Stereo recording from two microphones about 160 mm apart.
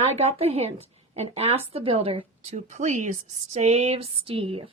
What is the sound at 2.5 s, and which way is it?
Speech, 50° right (ahead or behind).